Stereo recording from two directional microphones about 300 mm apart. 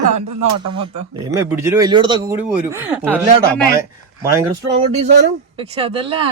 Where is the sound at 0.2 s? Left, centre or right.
Right.